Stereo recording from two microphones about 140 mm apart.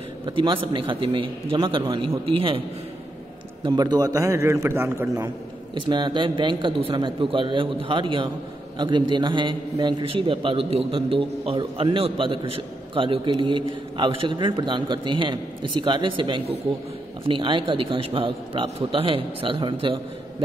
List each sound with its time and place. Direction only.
0.2 s a man's voice: 35° right (ahead or behind)
3.6 s a man's voice: 30° right (ahead or behind)
5.9 s a man's voice: 35° right (ahead or behind)